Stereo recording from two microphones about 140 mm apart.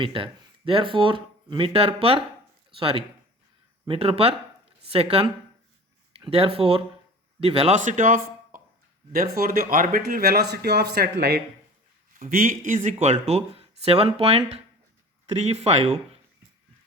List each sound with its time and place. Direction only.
0.0 s speech: 40° right (ahead or behind)
6.1 s speech: 45° right (ahead or behind); by 8.6 s 70° right (ahead or behind)
9.1 s speech: 90° right; by 16.0 s 50° right (ahead or behind)